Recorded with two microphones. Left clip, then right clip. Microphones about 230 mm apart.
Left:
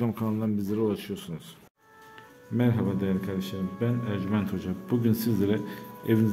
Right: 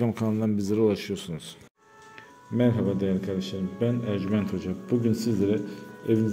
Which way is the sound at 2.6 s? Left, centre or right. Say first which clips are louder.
Right 3 dB; centre.